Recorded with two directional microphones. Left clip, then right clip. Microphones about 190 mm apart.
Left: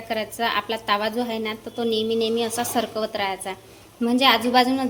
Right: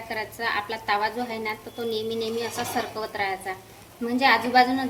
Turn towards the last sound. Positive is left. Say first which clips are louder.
# even
turn(degrees=50)  # may be behind; listen again after turning